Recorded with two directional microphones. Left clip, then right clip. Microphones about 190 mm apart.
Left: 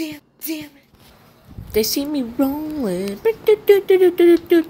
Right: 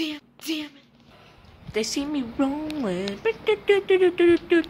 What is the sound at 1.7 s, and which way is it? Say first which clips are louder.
Speech: left 7 dB; 25° left (ahead or behind).